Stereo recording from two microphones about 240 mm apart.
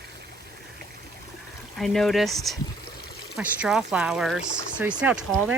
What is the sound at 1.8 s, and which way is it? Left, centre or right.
Speech, centre.